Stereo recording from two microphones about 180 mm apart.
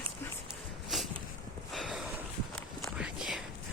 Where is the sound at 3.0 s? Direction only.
5° right (ahead or behind).